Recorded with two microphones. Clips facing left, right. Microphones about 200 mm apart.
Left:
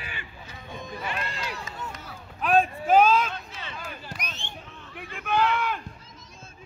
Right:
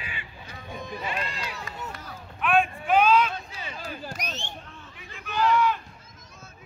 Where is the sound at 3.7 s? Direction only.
40° right (ahead or behind).